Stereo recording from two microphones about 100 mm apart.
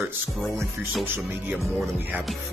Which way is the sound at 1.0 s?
20° right (ahead or behind).